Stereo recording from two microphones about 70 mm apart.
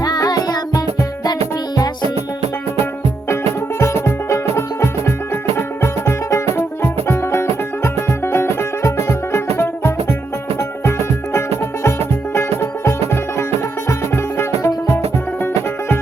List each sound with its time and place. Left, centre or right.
0.0 s music: left
3.8 s music: left